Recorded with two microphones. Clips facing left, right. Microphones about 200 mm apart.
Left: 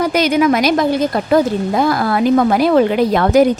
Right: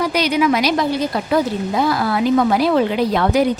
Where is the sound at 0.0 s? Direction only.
50° left (ahead or behind).